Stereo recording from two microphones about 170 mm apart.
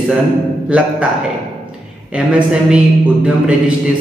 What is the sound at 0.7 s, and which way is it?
Speech, 5° right (ahead or behind).